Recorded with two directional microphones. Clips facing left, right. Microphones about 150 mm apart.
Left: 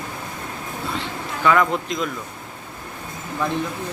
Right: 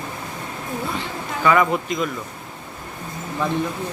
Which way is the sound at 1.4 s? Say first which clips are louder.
Right 1 dB; 5° right (ahead or behind).